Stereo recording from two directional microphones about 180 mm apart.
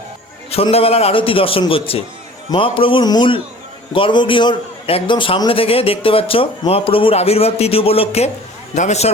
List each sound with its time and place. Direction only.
0.5 s a man's voice: 35° left (ahead or behind)